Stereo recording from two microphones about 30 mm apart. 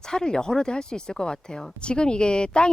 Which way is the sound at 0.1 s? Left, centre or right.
Left.